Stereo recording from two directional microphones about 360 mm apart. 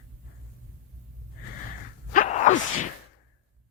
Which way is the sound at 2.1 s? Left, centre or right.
Left.